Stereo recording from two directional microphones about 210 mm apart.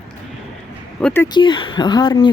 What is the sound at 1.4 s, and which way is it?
Speech, 25° left (ahead or behind).